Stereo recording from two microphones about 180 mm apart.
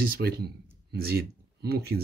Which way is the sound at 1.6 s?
60° right (ahead or behind).